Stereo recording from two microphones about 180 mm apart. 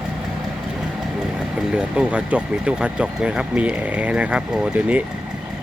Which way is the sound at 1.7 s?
5° right (ahead or behind).